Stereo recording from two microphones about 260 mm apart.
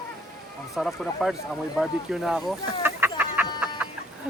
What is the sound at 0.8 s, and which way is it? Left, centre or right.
Speech, centre.